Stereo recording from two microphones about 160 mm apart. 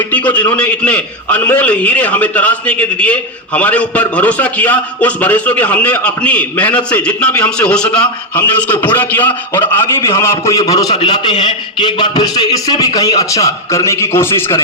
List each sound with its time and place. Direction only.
0.3 s a man's voice: 10° left (ahead or behind)